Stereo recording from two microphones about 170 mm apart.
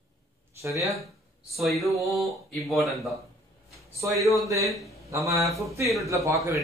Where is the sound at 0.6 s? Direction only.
20° right (ahead or behind).